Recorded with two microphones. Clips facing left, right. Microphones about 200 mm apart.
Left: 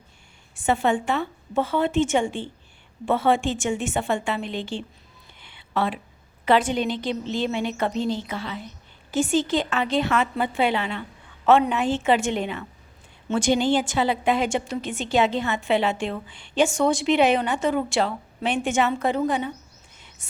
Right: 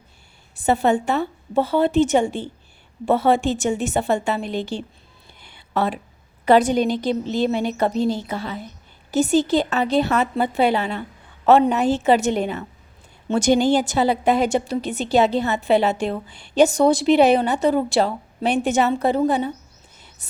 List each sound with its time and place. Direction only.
0.5 s a woman's voice: 35° right (ahead or behind)
5.4 s a sound: 40° right (ahead or behind)
6.4 s a woman's voice: 40° right (ahead or behind)